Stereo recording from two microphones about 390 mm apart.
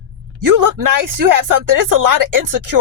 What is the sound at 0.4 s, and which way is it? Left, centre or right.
Speech, right.